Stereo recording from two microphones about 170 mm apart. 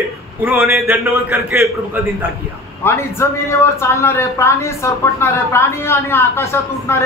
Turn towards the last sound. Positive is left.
turn(degrees=15)  # may be behind; listen again after turning